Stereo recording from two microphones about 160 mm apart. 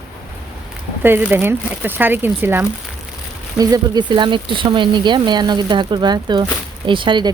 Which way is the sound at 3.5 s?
25° right (ahead or behind).